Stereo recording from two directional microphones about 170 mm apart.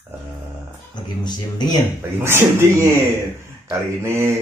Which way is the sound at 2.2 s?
15° right (ahead or behind).